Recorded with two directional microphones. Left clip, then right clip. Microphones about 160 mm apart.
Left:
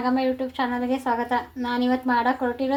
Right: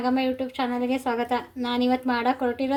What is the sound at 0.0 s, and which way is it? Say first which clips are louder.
A woman's voice: left 1 dB; 65° right (ahead or behind).